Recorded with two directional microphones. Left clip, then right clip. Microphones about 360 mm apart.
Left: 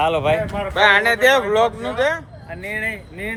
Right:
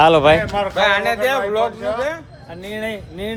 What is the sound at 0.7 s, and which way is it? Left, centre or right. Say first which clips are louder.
Speech: left 4 dB; left.